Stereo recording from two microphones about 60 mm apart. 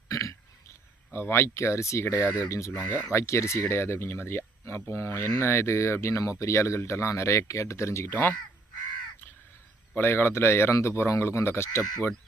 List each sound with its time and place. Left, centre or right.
0.1 s burping: left
1.1 s speech: left
9.9 s speech: left